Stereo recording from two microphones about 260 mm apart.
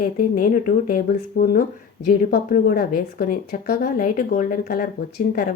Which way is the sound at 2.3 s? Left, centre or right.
Left.